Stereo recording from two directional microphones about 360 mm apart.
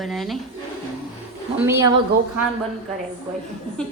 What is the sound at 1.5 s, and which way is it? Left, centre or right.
Speech, centre.